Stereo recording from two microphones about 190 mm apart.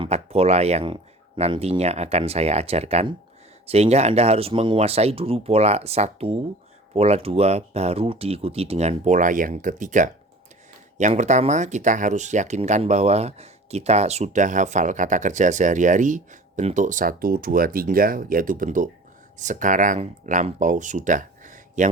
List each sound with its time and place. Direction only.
0.0 s speech: 30° right (ahead or behind)